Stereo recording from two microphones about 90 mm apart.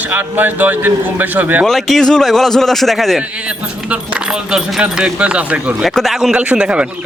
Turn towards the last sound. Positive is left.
turn(degrees=-10)  # may be behind; listen again after turning